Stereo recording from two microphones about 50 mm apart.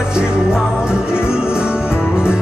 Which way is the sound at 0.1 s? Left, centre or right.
Centre.